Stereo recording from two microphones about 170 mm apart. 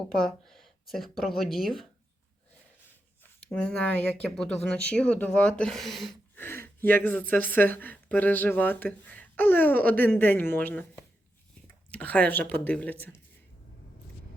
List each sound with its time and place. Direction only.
0.3 s speech: centre (ahead or behind)
3.5 s speech: 5° left (ahead or behind)
6.3 s speech: 15° left (ahead or behind)